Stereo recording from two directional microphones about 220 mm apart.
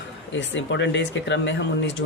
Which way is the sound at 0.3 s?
55° left (ahead or behind).